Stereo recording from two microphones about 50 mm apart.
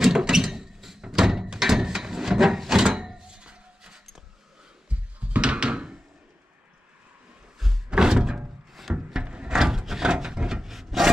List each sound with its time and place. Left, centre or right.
0.0 s a sound: centre
4.8 s door: right
7.5 s slam: centre
7.9 s door: centre
8.9 s wood: centre
9.5 s wood: centre